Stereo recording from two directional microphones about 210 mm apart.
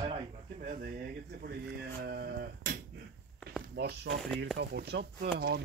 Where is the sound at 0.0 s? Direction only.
25° right (ahead or behind).